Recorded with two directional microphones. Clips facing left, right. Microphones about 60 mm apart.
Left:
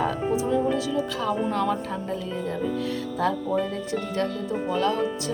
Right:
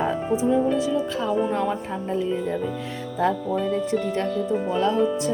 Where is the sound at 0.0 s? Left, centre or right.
Right.